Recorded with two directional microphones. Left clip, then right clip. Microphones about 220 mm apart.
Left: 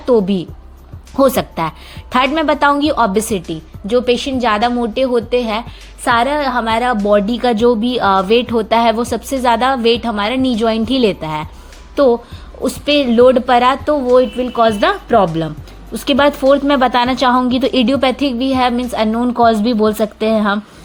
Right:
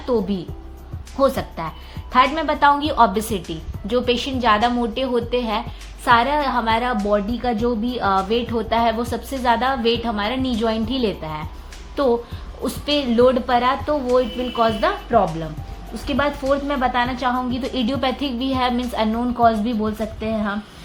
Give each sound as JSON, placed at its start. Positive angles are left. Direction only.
{"t": 0.0, "sound": "a woman's voice", "side_deg": 35}
{"t": 7.3, "sound": "speech", "side_deg": 45}
{"t": 13.1, "sound": "a woman's voice", "side_deg": 35}